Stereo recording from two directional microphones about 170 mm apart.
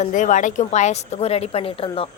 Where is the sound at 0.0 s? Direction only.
45° left (ahead or behind).